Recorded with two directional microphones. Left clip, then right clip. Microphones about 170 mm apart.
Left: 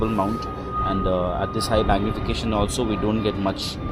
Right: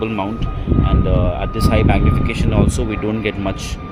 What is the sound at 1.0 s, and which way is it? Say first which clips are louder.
Speech: right 2 dB; 20° right (ahead or behind).